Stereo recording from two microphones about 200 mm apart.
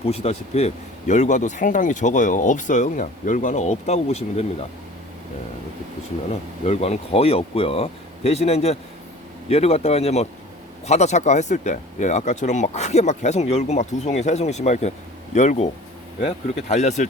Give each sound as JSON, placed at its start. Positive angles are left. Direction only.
{"t": 0.1, "sound": "speech", "side_deg": 30}
{"t": 6.7, "sound": "speech", "side_deg": 30}